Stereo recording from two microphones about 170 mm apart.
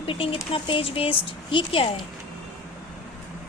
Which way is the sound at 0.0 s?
30° left (ahead or behind).